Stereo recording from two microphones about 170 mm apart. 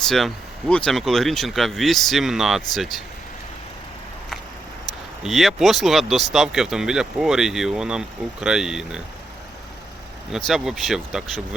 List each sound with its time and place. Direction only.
0.7 s speech: 5° left (ahead or behind)
5.2 s speech: centre (ahead or behind)
10.3 s speech: centre (ahead or behind)